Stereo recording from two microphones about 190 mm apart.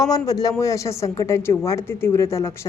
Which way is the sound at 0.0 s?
20° left (ahead or behind).